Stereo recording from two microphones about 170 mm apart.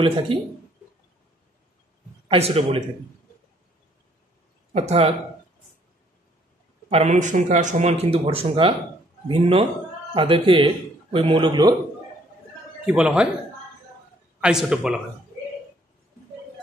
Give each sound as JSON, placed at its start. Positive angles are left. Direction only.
{"t": 0.3, "sound": "speech", "side_deg": -30}
{"t": 2.2, "sound": "speech", "side_deg": -35}
{"t": 4.7, "sound": "speech", "side_deg": -40}
{"t": 6.9, "sound": "speech", "side_deg": -40}
{"t": 12.8, "sound": "speech", "side_deg": -5}
{"t": 14.4, "sound": "speech", "side_deg": -5}